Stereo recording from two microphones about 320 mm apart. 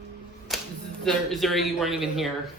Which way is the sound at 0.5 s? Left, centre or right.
Centre.